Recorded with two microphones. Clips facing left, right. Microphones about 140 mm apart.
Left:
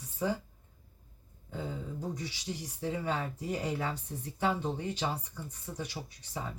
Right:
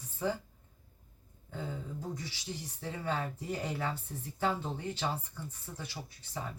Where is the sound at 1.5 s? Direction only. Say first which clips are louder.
Left 2 dB; 15° left (ahead or behind).